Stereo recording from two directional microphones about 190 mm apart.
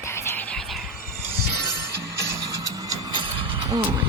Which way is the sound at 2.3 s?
20° right (ahead or behind).